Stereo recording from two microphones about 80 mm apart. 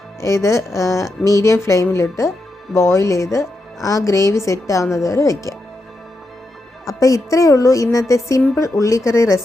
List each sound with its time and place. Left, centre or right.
0.2 s a woman's voice: left
6.8 s a woman's voice: left